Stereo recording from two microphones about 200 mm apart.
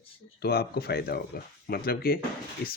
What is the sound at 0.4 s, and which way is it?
Speech, 50° left (ahead or behind).